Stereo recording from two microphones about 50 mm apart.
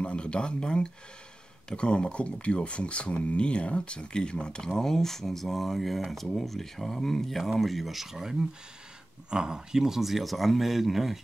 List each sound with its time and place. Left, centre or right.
0.0 s speech: left; by 11.2 s centre